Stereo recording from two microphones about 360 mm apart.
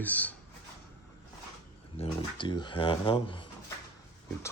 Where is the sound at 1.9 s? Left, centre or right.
Centre.